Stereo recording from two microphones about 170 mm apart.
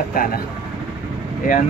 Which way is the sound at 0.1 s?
60° left (ahead or behind).